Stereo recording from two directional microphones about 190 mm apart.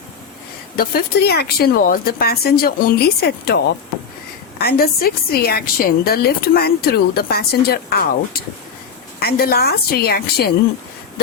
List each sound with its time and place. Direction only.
0.8 s a woman's voice: 55° left (ahead or behind)